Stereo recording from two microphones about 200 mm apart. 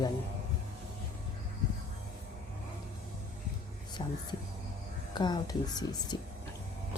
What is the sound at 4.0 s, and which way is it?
A woman's voice, 25° left (ahead or behind).